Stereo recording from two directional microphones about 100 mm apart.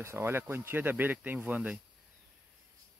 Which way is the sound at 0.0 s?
25° right (ahead or behind).